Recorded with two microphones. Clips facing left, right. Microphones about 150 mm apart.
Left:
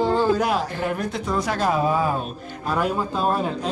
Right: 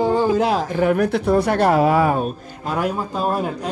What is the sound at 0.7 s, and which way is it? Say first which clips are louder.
Speech: right 8 dB; 60° right (ahead or behind).